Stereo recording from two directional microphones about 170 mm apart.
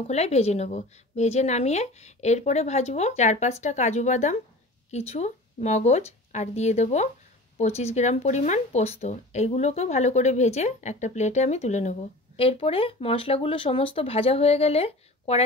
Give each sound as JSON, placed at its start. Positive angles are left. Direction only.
{"t": 0.0, "sound": "speech", "side_deg": 40}